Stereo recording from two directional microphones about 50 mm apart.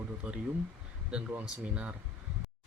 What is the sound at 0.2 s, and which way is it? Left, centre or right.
Speech, right.